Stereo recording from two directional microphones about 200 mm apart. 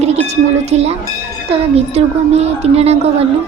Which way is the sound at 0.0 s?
30° right (ahead or behind).